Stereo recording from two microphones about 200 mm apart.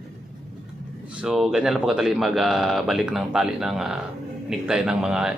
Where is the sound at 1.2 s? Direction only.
Centre (ahead or behind).